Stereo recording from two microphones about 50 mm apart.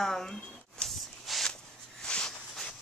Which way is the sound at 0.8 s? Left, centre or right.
Centre.